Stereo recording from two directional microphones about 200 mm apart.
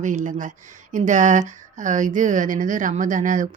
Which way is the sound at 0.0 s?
40° right (ahead or behind).